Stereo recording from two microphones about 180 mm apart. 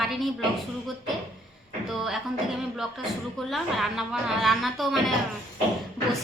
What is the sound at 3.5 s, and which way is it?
A woman's voice, centre (ahead or behind).